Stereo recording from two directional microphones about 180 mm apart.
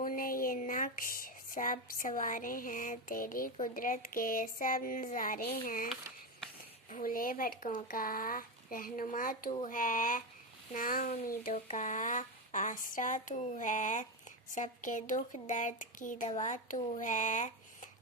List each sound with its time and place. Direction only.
0.0 s a sound: 50° left (ahead or behind)
5.6 s speech: 50° left (ahead or behind)
6.9 s speech: 50° left (ahead or behind)